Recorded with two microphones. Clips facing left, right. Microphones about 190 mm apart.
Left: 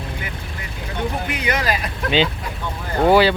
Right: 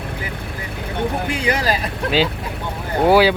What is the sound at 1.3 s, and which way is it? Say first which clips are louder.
Speech: right 2 dB; 30° right (ahead or behind).